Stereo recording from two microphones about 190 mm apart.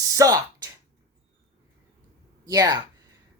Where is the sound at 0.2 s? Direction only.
20° right (ahead or behind).